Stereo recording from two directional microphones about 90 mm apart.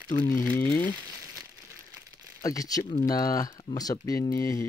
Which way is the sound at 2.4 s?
45° left (ahead or behind).